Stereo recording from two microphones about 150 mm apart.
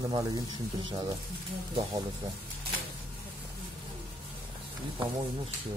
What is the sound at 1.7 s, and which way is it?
Speech, 40° right (ahead or behind).